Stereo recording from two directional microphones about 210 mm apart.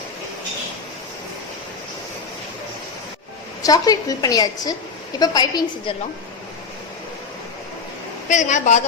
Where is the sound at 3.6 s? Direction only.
15° left (ahead or behind).